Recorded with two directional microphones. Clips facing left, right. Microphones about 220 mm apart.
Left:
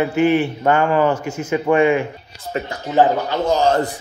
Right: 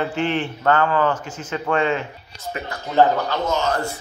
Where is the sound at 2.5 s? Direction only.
35° left (ahead or behind).